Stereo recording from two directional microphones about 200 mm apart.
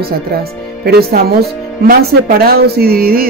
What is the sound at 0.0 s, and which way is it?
Speech, 50° right (ahead or behind).